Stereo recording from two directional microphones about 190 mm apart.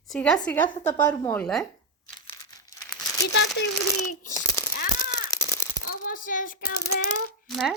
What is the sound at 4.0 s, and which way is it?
Speech, 15° left (ahead or behind).